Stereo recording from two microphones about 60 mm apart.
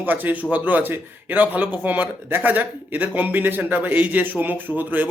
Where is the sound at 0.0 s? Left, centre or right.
Right.